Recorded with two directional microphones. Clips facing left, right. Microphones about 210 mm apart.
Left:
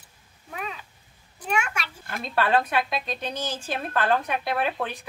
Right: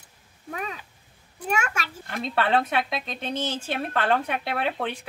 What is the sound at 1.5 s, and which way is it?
Speech, 40° right (ahead or behind).